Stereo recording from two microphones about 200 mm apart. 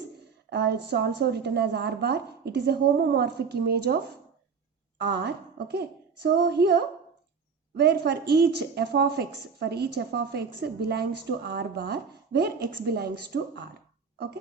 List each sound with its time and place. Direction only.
0.5 s a woman's voice: 60° right (ahead or behind)
7.8 s a woman's voice: 55° right (ahead or behind)